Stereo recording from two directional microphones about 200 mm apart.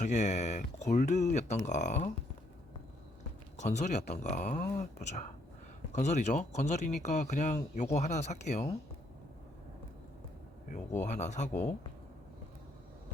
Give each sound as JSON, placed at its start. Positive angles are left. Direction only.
{"t": 0.0, "sound": "speech", "side_deg": 35}
{"t": 3.6, "sound": "speech", "side_deg": 35}
{"t": 11.0, "sound": "speech", "side_deg": 35}